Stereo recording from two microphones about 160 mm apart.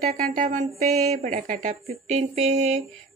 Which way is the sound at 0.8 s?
45° right (ahead or behind).